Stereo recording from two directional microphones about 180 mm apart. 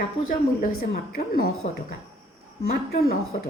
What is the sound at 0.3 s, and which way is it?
Speech, 55° left (ahead or behind).